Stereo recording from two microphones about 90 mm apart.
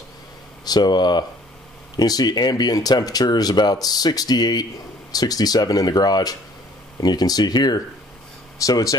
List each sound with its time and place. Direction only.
0.7 s speech: 55° left (ahead or behind)